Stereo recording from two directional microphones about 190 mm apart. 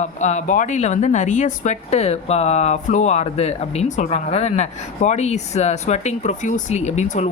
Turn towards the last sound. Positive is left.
turn(degrees=40)  # may be behind; listen again after turning